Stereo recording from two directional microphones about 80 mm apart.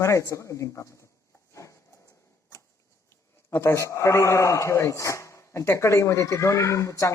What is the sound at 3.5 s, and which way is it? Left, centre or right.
A man's voice, left.